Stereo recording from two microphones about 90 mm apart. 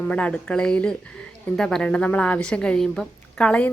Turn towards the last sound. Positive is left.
turn(degrees=10)  # may be behind; listen again after turning